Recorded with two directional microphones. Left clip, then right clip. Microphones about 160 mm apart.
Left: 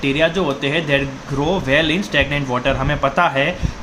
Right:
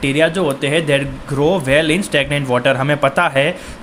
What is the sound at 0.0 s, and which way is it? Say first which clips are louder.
Speech: right 2 dB; 40° right (ahead or behind).